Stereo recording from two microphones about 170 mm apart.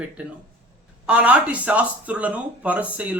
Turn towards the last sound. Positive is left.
turn(degrees=-10)  # may be behind; listen again after turning